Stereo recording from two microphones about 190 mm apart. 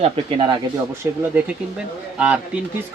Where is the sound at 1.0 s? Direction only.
15° right (ahead or behind).